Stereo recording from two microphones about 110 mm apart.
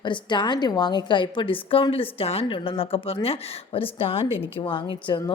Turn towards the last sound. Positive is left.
turn(degrees=45)  # may be behind; listen again after turning